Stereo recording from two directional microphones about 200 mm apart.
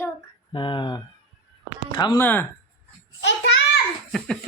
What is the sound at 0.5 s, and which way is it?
Speech, 25° left (ahead or behind).